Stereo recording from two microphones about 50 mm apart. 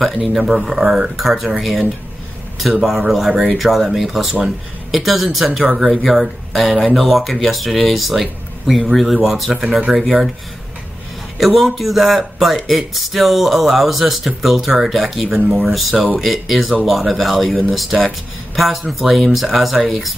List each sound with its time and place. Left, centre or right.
0.0 s speech: centre
0.4 s speech: centre
2.8 s speech: centre
9.6 s speech: centre
11.3 s speech: centre